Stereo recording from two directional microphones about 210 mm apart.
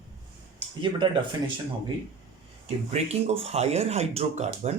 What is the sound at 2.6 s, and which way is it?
Speech, 30° right (ahead or behind).